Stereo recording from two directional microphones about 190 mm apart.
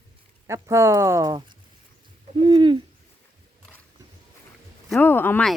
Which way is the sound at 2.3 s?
25° right (ahead or behind).